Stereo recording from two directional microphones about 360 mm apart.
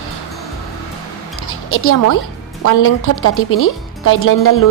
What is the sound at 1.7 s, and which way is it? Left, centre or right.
Speech, left.